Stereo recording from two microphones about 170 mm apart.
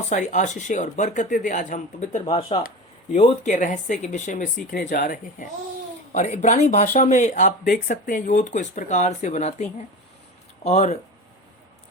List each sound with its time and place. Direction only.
0.1 s speech: 45° left (ahead or behind)
2.6 s a sound: 50° left (ahead or behind)
3.2 s speech: 45° left (ahead or behind)
6.1 s speech: 45° left (ahead or behind)